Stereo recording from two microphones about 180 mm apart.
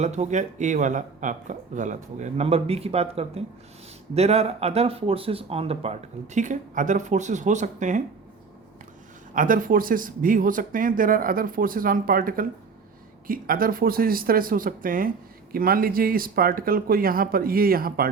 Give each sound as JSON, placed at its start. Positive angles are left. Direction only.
{"t": 0.0, "sound": "speech", "side_deg": -40}
{"t": 9.3, "sound": "speech", "side_deg": -50}